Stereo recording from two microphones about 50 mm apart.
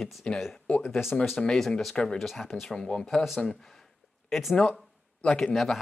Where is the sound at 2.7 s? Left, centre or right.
Centre.